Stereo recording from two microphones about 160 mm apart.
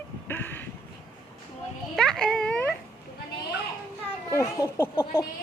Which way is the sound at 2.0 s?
5° left (ahead or behind).